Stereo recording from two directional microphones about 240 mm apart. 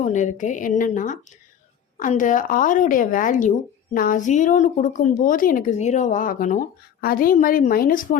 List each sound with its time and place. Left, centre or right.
0.0 s a woman's voice: left